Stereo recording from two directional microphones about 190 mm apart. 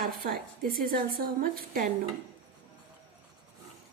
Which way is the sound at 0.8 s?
50° right (ahead or behind).